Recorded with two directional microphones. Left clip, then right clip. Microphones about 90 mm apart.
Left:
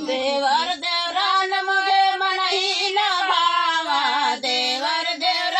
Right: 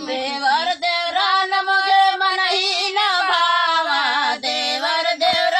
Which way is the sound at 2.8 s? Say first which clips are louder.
Right 2 dB; 35° right (ahead or behind).